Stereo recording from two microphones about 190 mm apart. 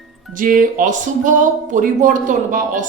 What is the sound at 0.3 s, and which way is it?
Speech, 45° right (ahead or behind).